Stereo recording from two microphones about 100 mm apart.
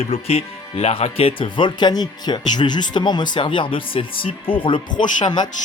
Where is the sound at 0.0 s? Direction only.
90° left.